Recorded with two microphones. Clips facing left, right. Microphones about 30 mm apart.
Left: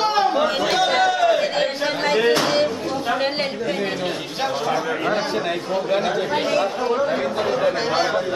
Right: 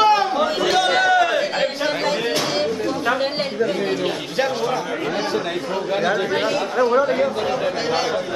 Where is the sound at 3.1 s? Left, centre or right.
Centre.